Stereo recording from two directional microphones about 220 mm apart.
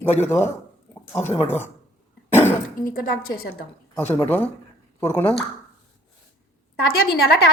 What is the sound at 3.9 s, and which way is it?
Speech, 10° left (ahead or behind).